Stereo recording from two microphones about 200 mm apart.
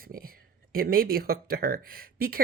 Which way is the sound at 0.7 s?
45° right (ahead or behind).